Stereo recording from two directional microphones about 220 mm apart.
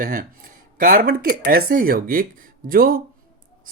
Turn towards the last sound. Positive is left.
turn(degrees=-40)  # may be behind; listen again after turning